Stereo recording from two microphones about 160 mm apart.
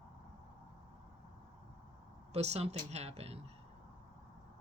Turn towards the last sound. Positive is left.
turn(degrees=-40)  # may be behind; listen again after turning